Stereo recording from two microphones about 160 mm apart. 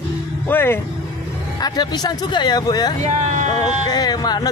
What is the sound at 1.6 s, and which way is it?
A man's voice, 25° left (ahead or behind).